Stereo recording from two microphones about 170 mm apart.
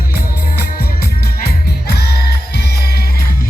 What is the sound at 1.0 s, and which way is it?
Music, 65° left (ahead or behind).